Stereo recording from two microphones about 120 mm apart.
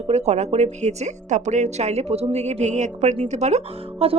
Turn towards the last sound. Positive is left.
turn(degrees=-60)  # may be behind; listen again after turning